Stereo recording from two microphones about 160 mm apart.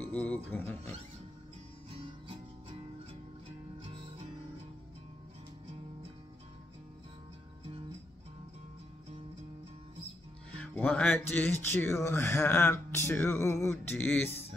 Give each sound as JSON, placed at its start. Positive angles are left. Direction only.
{"t": 0.1, "sound": "speech", "side_deg": 10}
{"t": 1.9, "sound": "music", "side_deg": -35}
{"t": 10.6, "sound": "speech", "side_deg": 10}